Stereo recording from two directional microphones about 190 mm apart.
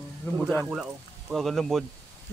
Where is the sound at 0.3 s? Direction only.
10° left (ahead or behind).